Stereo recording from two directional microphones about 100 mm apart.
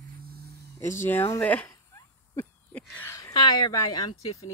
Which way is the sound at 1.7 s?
35° left (ahead or behind).